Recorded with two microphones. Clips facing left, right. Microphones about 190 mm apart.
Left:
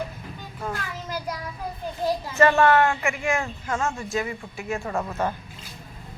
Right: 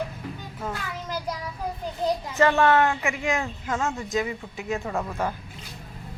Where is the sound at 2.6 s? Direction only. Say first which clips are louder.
Left 1 dB; 15° right (ahead or behind).